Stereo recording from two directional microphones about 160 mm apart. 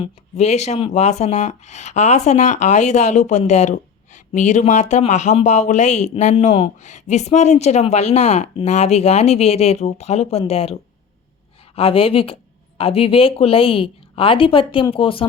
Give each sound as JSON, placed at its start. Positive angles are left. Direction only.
{"t": 0.0, "sound": "speech", "side_deg": 45}